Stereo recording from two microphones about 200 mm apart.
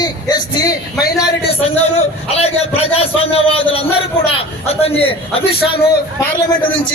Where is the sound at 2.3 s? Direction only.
30° left (ahead or behind).